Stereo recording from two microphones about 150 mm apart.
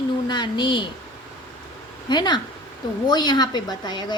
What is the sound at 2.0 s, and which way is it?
A woman's voice, 30° left (ahead or behind).